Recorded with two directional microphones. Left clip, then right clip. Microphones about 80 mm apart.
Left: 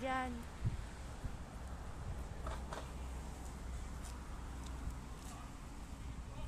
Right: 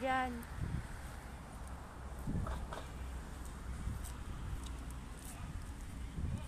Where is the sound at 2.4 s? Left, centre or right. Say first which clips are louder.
Left 1 dB; centre.